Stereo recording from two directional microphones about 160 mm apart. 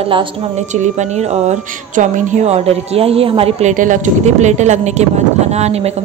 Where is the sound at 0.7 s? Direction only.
45° right (ahead or behind).